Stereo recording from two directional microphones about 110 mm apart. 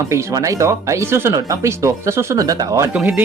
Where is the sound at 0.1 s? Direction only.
25° right (ahead or behind).